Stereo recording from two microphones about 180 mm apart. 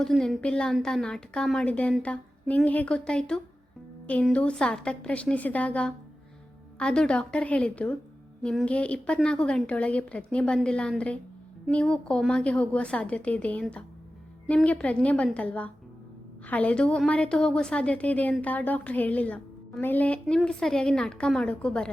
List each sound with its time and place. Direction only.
0.0 s a woman's voice: centre (ahead or behind)